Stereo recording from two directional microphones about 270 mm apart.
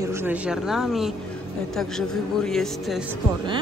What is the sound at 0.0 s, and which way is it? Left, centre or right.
A man's voice, centre.